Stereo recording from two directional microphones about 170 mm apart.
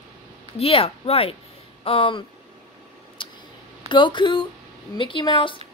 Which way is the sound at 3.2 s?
30° left (ahead or behind).